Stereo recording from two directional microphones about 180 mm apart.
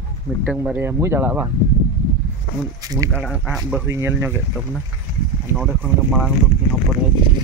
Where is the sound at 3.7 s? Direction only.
10° right (ahead or behind).